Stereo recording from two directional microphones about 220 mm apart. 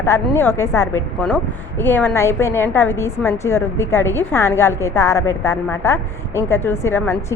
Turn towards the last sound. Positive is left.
turn(degrees=10)  # may be behind; listen again after turning